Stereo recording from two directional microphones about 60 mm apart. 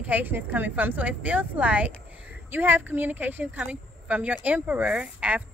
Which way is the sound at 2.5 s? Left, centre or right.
Right.